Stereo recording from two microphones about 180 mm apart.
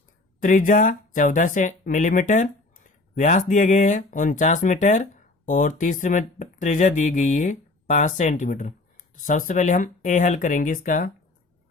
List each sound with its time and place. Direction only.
0.3 s speech: 50° left (ahead or behind)